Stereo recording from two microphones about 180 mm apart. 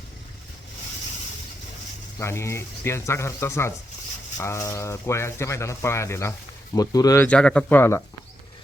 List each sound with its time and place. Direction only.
2.1 s speech: 15° left (ahead or behind)
7.3 s speech: 5° left (ahead or behind)